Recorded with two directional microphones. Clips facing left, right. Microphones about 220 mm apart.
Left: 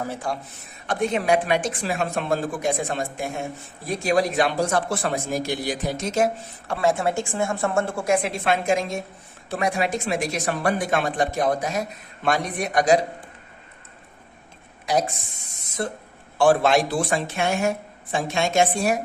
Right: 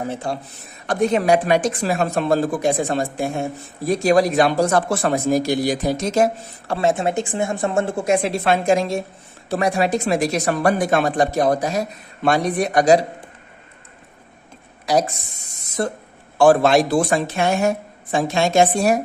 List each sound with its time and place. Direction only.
0.0 s a woman's voice: 25° right (ahead or behind)
0.9 s speech: 40° right (ahead or behind)
6.7 s a woman's voice: 25° right (ahead or behind)
15.8 s speech: 40° right (ahead or behind)